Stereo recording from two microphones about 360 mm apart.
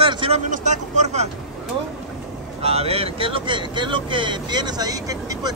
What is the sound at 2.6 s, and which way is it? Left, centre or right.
Speech, centre.